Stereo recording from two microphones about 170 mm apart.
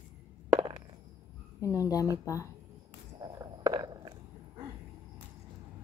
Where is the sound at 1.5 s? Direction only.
20° left (ahead or behind).